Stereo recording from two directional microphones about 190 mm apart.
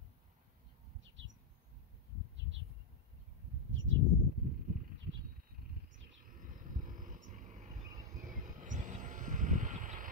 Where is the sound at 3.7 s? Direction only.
80° right.